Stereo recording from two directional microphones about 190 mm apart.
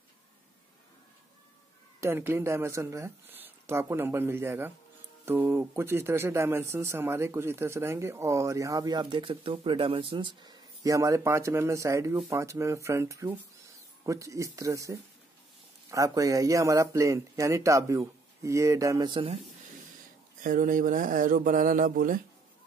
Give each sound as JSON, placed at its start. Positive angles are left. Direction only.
{"t": 2.0, "sound": "speech", "side_deg": -10}
{"t": 20.4, "sound": "speech", "side_deg": -45}